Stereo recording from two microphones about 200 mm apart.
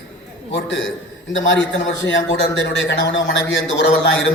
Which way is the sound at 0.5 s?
65° left (ahead or behind).